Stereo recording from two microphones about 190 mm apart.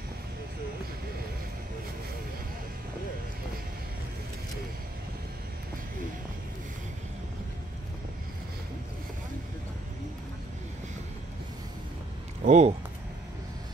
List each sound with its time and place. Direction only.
12.4 s speech: 35° right (ahead or behind)